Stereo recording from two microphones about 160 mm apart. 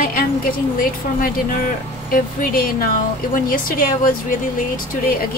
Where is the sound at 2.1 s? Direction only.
65° left (ahead or behind).